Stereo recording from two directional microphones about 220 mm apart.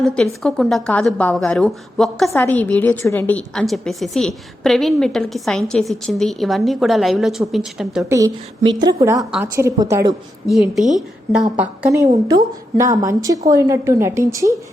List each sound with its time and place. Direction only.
0.0 s a woman's voice: 5° left (ahead or behind)
8.7 s a woman's voice: 15° right (ahead or behind)
10.4 s a woman's voice: centre (ahead or behind)